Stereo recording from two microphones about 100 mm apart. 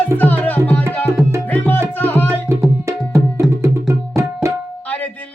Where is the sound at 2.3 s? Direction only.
25° right (ahead or behind).